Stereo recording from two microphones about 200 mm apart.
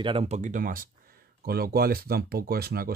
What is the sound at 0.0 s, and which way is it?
Speech, 30° right (ahead or behind).